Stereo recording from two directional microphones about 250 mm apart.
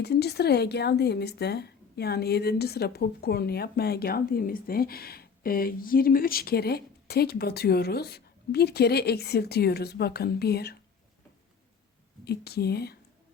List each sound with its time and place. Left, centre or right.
0.0 s speech: left
12.2 s speech: left